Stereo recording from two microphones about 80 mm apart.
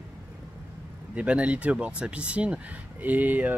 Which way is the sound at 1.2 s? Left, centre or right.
Centre.